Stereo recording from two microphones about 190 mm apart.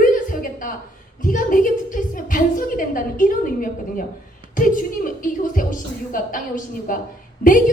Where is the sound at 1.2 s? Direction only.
45° left (ahead or behind).